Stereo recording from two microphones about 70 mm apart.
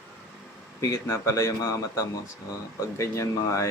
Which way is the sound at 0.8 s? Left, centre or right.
Left.